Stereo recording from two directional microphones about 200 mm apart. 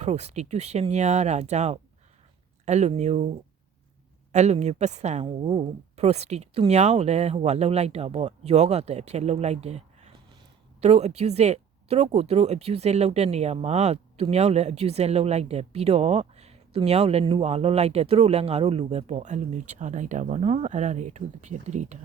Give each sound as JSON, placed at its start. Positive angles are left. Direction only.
{"t": 0.0, "sound": "speech", "side_deg": -35}
{"t": 4.3, "sound": "speech", "side_deg": -35}